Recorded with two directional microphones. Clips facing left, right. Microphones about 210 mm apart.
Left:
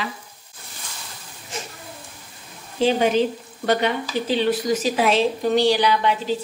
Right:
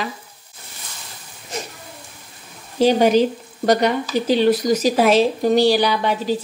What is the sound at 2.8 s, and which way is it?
Speech, 40° right (ahead or behind).